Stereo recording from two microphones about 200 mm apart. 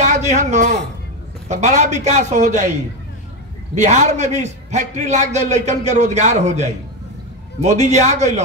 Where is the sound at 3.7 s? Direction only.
35° right (ahead or behind).